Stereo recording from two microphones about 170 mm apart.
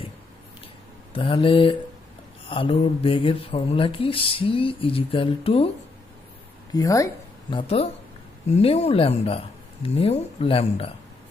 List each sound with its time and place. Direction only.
1.1 s speech: 30° left (ahead or behind)
6.7 s a woman's voice: 20° left (ahead or behind)